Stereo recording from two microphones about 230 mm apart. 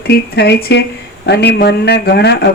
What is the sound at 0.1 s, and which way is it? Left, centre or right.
Speech, left.